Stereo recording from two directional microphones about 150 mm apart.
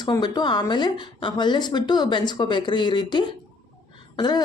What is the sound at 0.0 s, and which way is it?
A woman's voice, 30° left (ahead or behind).